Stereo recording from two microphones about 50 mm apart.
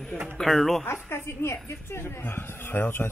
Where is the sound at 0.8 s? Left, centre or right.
Left.